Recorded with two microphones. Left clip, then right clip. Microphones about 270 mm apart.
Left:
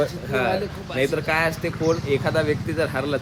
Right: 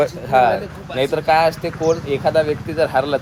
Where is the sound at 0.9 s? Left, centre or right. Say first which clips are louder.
Right 6 dB; centre.